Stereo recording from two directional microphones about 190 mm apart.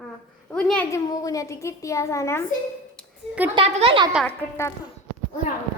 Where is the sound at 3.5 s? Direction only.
30° right (ahead or behind).